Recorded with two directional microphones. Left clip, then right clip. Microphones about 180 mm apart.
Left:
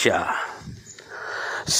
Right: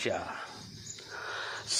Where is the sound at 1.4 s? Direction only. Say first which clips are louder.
Left 11 dB; 35° left (ahead or behind).